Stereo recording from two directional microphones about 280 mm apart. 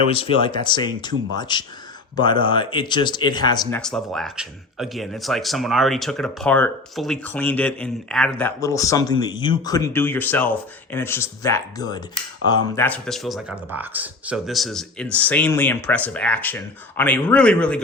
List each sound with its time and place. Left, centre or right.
0.1 s speech: centre
3.8 s speech: centre